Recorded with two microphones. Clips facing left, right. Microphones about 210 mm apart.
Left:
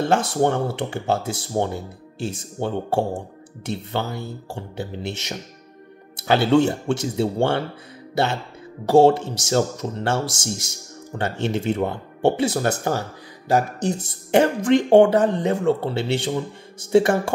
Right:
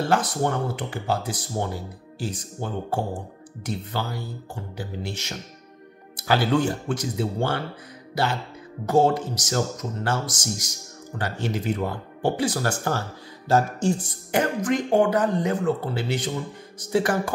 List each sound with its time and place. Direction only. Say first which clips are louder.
0.0 s speech: left 4 dB; 25° left (ahead or behind)